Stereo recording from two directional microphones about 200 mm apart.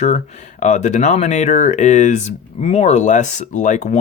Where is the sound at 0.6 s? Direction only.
35° left (ahead or behind).